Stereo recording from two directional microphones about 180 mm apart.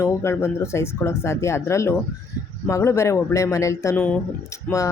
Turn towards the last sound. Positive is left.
turn(degrees=15)  # may be behind; listen again after turning